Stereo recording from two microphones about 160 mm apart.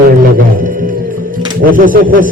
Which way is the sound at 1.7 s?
60° right (ahead or behind).